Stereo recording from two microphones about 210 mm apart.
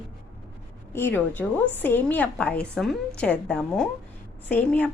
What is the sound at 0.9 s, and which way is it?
A woman's voice, 10° left (ahead or behind).